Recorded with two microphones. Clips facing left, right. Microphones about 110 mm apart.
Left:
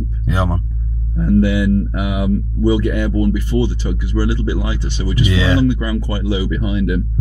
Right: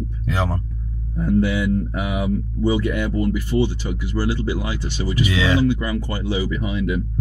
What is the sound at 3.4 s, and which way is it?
Speech, 20° left (ahead or behind).